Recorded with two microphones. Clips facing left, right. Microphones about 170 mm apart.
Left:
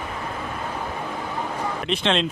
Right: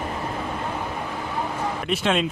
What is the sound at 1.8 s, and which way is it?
Speech, 5° right (ahead or behind).